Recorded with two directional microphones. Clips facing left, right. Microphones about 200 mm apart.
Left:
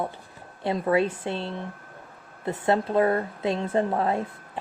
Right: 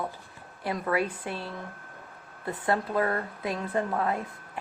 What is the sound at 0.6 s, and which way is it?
A woman's voice, 25° left (ahead or behind).